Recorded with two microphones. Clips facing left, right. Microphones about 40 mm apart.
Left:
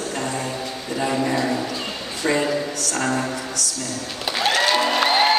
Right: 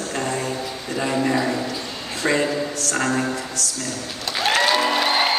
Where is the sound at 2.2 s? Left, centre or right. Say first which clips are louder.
Even; right.